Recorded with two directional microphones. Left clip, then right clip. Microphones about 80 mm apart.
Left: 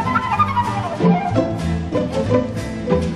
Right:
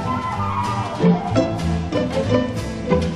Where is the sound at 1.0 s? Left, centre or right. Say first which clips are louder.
Left 1 dB; right.